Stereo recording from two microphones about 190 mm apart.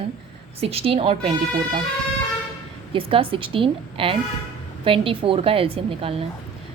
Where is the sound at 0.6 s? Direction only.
30° right (ahead or behind).